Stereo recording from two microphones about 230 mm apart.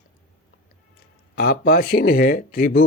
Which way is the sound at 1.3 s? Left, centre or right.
Left.